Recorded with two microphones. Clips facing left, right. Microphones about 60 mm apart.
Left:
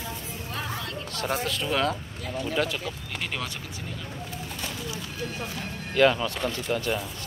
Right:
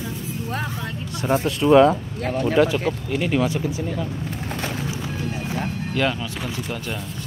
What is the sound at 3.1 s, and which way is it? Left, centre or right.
Speech, centre.